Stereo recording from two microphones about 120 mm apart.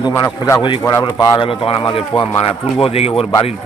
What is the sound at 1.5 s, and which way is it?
Speech, 45° left (ahead or behind).